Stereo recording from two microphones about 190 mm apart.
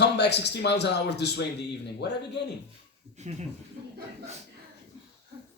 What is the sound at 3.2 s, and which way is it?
Speech, 35° right (ahead or behind).